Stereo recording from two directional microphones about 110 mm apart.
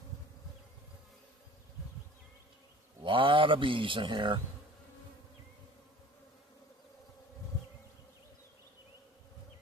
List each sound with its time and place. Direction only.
3.0 s speech: 50° right (ahead or behind)